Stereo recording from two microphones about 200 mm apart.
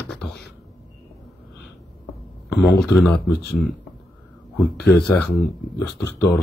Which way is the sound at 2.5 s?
55° left (ahead or behind).